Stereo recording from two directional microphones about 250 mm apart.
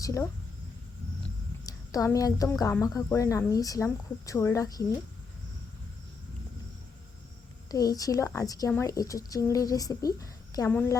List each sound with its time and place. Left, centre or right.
0.0 s speech: centre
1.6 s a woman's voice: centre
7.7 s a woman's voice: centre